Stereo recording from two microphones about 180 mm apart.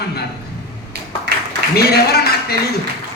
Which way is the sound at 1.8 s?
60° left (ahead or behind).